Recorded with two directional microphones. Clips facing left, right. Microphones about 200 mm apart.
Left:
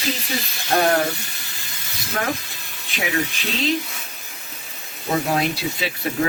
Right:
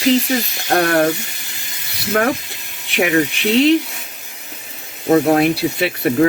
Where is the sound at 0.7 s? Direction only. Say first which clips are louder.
Right 3 dB; 65° right (ahead or behind).